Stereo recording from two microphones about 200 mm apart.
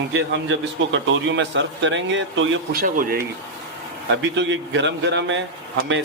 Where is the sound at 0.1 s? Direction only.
65° right (ahead or behind).